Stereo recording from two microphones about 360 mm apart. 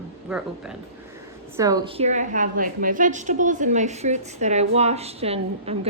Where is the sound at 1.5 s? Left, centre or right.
Centre.